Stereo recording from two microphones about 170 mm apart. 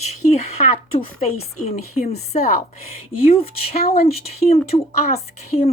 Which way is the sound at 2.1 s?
40° left (ahead or behind).